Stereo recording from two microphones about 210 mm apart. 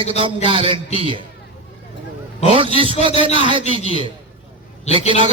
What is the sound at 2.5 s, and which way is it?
A man's voice, 25° right (ahead or behind).